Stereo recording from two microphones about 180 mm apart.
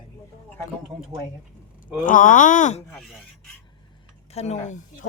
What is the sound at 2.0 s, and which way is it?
Speech, 45° left (ahead or behind).